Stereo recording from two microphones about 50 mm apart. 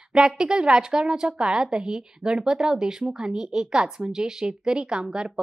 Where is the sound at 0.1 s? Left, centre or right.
Centre.